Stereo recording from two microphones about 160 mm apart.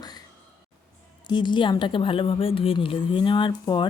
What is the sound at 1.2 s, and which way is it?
A woman's voice, 30° left (ahead or behind).